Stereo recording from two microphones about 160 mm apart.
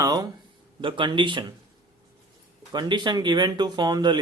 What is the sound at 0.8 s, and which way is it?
Speech, 30° right (ahead or behind).